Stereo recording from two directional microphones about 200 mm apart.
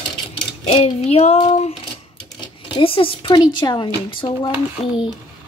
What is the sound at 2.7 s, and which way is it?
Speech, 25° left (ahead or behind).